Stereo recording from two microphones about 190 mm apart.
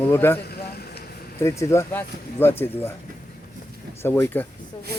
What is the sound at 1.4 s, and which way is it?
Speech, 15° left (ahead or behind).